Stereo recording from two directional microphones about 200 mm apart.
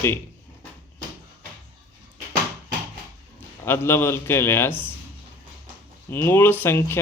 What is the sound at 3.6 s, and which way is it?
Speech, 10° left (ahead or behind).